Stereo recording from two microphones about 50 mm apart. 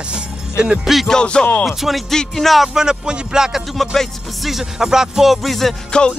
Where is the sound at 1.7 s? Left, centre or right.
Centre.